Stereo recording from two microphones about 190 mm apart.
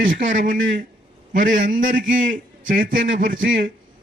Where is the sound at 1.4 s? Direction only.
45° right (ahead or behind).